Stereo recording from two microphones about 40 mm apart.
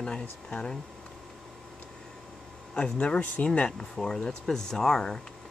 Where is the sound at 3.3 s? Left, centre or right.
Left.